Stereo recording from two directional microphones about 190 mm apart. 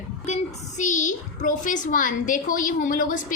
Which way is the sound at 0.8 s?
40° left (ahead or behind).